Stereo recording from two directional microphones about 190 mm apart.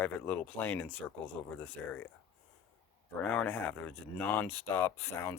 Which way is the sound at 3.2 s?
10° left (ahead or behind).